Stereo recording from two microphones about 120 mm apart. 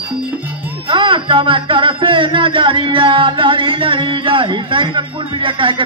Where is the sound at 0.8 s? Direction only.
45° right (ahead or behind).